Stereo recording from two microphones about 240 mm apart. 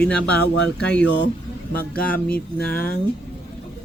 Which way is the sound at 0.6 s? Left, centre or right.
Left.